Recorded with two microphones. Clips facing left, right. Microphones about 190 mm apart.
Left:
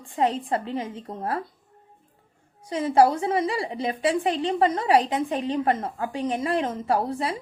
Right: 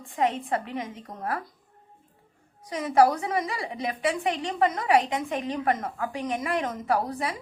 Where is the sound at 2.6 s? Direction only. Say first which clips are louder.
Left 2 dB; 30° left (ahead or behind).